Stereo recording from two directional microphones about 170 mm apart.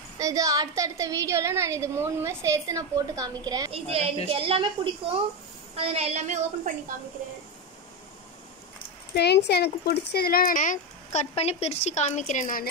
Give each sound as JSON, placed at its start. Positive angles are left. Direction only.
{"t": 0.2, "sound": "a woman's voice", "side_deg": -20}
{"t": 3.7, "sound": "a woman's voice", "side_deg": -35}
{"t": 5.8, "sound": "a woman's voice", "side_deg": -40}
{"t": 9.1, "sound": "speech", "side_deg": 80}